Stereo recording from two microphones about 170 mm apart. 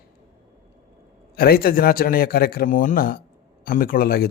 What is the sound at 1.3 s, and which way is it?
Speech, 60° left (ahead or behind).